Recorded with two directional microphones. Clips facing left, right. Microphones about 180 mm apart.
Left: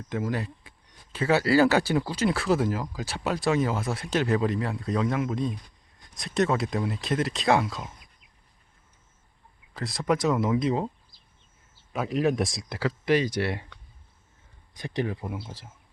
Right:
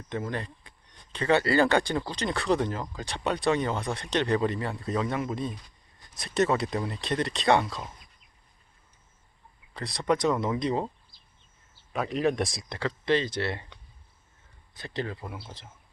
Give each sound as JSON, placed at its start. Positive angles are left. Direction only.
{"t": 0.1, "sound": "speech", "side_deg": 5}
{"t": 9.7, "sound": "speech", "side_deg": 0}
{"t": 11.9, "sound": "speech", "side_deg": 0}
{"t": 14.7, "sound": "speech", "side_deg": 15}